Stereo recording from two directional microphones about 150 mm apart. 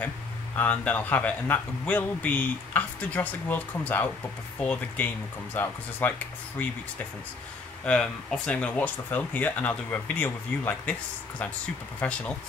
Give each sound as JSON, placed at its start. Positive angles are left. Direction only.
{"t": 0.6, "sound": "speech", "side_deg": 10}
{"t": 7.8, "sound": "speech", "side_deg": 5}